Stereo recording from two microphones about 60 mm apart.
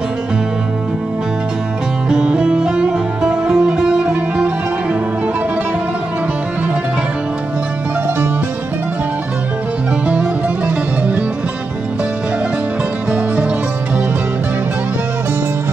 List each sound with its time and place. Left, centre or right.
2.0 s music: centre
10.0 s music: right